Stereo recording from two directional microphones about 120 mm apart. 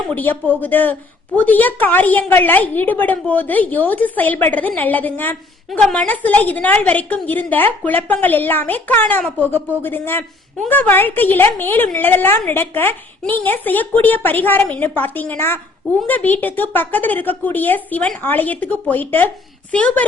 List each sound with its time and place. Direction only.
0.1 s a woman's voice: 15° left (ahead or behind)